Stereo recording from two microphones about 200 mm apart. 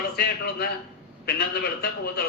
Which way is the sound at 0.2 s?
50° left (ahead or behind).